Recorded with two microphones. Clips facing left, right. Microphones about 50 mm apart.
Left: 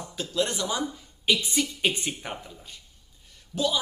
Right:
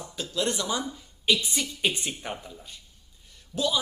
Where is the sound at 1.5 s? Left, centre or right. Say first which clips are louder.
Left 2 dB; centre.